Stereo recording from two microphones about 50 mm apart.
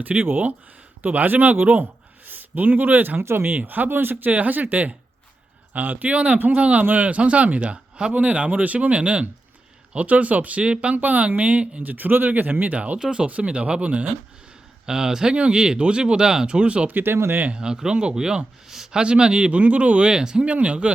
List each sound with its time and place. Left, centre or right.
0.0 s a man's voice: right
3.2 s speech: right
3.6 s speech: right
10.9 s speech: right
11.8 s speech: right
13.0 s speech: centre
14.8 s speech: centre
16.9 s speech: right
17.5 s speech: centre